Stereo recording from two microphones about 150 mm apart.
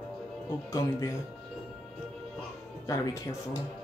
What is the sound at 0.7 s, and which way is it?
Speech, 20° left (ahead or behind).